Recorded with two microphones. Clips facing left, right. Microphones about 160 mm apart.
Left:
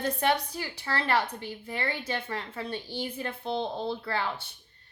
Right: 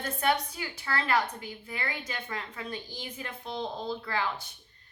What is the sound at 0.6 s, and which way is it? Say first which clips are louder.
Speech: left 1 dB; 30° left (ahead or behind).